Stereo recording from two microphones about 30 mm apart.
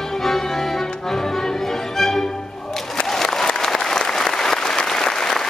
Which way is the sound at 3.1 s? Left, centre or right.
Centre.